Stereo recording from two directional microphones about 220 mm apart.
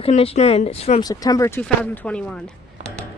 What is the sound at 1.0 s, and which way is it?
Speech, 15° left (ahead or behind).